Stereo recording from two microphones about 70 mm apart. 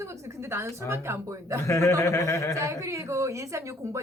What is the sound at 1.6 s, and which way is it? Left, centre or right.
Speech, left.